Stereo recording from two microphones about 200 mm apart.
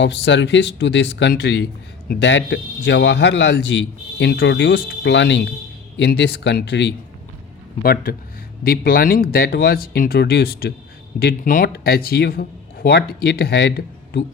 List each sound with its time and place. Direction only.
0.0 s speech: 65° left (ahead or behind)
7.8 s speech: 45° left (ahead or behind)